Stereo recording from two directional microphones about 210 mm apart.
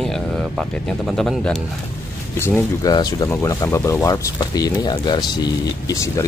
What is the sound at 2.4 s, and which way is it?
Speech, 15° left (ahead or behind).